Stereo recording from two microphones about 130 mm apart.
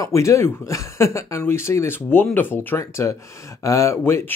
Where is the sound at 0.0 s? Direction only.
25° left (ahead or behind).